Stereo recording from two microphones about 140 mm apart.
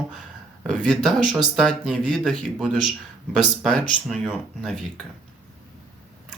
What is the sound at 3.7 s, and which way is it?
Speech, 5° left (ahead or behind).